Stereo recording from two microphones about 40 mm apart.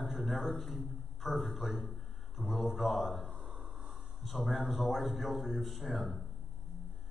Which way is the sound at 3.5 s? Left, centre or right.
Right.